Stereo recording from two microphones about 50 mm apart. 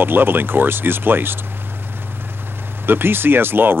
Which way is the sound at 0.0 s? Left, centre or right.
Right.